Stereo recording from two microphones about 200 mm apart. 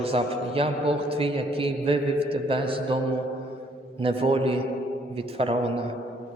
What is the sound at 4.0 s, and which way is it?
A man's voice, 30° right (ahead or behind).